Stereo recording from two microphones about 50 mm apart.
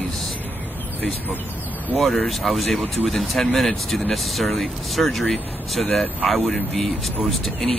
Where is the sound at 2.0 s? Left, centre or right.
Centre.